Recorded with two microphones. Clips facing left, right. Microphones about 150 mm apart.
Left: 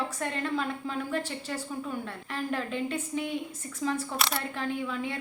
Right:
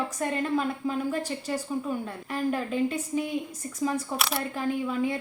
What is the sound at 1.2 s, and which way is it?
Speech, 40° right (ahead or behind).